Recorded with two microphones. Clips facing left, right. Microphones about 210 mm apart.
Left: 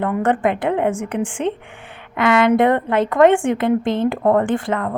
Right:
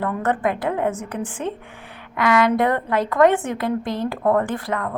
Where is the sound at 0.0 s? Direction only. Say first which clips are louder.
Left 4 dB; 25° left (ahead or behind).